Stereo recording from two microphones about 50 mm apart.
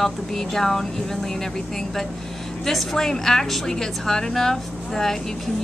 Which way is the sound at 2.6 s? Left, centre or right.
Centre.